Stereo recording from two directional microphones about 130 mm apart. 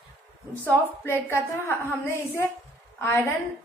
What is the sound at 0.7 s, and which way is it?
A woman's voice, 15° left (ahead or behind).